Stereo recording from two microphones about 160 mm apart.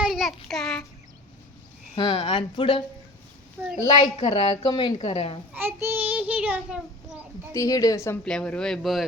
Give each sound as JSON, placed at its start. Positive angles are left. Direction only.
{"t": 0.0, "sound": "child singing", "side_deg": 0}
{"t": 2.0, "sound": "speech", "side_deg": 30}
{"t": 4.2, "sound": "speech", "side_deg": 40}
{"t": 4.7, "sound": "a woman's voice", "side_deg": 25}
{"t": 4.9, "sound": "speech", "side_deg": 40}
{"t": 5.5, "sound": "a child's voice", "side_deg": -15}
{"t": 7.5, "sound": "a woman's voice", "side_deg": 20}
{"t": 8.2, "sound": "speech", "side_deg": 5}